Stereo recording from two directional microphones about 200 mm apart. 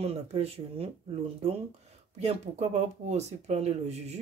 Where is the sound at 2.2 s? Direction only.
35° right (ahead or behind).